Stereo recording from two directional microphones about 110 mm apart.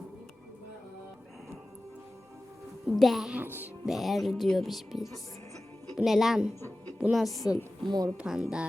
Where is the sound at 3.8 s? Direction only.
Centre (ahead or behind).